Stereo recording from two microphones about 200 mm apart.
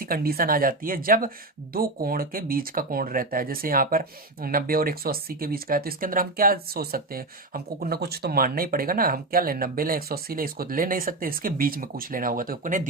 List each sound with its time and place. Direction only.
0.0 s speech: 50° right (ahead or behind)